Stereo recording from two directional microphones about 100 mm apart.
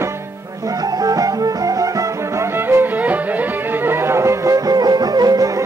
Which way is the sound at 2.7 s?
20° right (ahead or behind).